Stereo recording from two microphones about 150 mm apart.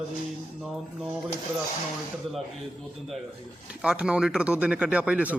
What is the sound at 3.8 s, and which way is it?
A man's voice, 5° right (ahead or behind).